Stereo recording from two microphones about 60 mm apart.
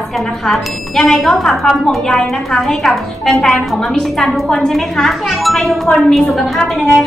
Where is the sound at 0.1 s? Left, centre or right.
Centre.